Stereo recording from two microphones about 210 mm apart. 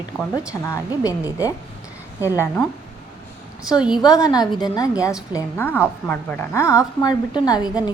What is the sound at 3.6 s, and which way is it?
Speech, 5° right (ahead or behind).